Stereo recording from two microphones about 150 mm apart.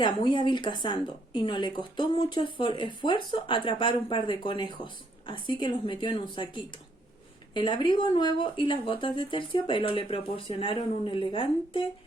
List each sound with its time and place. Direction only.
0.0 s a woman's voice: 30° left (ahead or behind)